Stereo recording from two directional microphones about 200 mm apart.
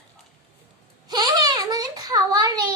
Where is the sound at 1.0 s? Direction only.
20° right (ahead or behind).